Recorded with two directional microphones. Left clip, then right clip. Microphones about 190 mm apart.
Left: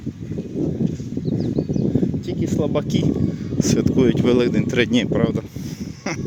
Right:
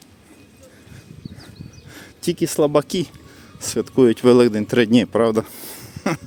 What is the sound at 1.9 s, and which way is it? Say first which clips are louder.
Speech: left 2 dB; 50° right (ahead or behind).